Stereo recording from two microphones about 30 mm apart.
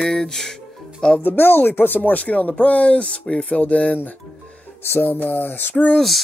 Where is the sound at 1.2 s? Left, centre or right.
Left.